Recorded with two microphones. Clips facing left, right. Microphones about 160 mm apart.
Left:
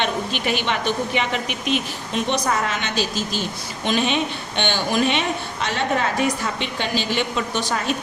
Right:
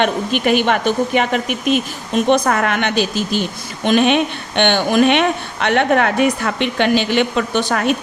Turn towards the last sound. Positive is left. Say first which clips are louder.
# right 6 dB
turn(degrees=-65)  # may be behind; listen again after turning